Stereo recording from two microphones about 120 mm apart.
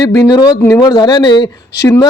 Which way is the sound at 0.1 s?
35° left (ahead or behind).